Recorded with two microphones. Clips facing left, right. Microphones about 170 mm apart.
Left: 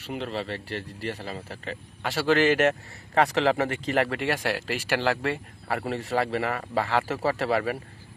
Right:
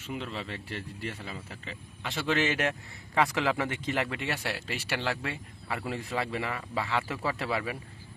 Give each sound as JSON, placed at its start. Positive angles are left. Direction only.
{"t": 0.0, "sound": "speech", "side_deg": 75}
{"t": 0.3, "sound": "speech", "side_deg": 35}
{"t": 3.2, "sound": "speech", "side_deg": 35}
{"t": 4.2, "sound": "speech", "side_deg": 60}
{"t": 5.2, "sound": "speech", "side_deg": 60}